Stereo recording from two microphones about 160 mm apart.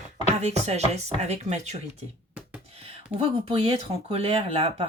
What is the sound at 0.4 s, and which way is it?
Speech, 45° right (ahead or behind).